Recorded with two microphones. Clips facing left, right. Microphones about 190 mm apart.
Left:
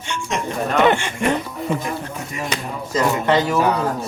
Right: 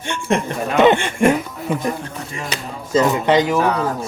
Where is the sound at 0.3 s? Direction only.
55° right (ahead or behind).